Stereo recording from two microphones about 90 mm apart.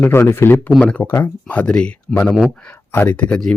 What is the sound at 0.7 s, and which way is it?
Speech, 10° left (ahead or behind).